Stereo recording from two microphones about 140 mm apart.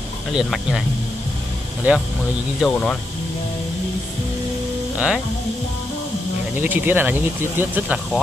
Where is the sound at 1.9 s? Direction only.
10° right (ahead or behind).